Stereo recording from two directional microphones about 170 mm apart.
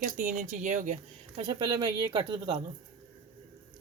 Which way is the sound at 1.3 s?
25° right (ahead or behind).